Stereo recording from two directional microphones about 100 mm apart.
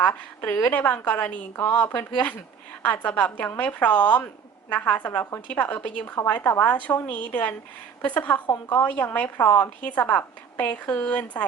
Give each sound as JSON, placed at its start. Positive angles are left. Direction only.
{"t": 0.1, "sound": "a woman's voice", "side_deg": 20}